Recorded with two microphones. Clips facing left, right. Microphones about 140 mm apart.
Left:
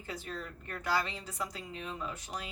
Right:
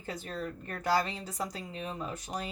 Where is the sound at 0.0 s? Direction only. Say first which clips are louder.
Right 4 dB; 40° right (ahead or behind).